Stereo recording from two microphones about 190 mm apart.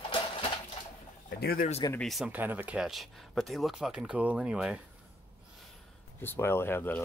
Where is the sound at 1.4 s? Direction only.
50° left (ahead or behind).